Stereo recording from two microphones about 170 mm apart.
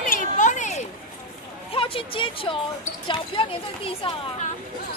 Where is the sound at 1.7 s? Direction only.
30° left (ahead or behind).